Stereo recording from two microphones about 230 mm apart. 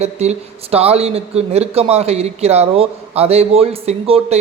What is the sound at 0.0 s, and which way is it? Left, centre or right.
Speech, right.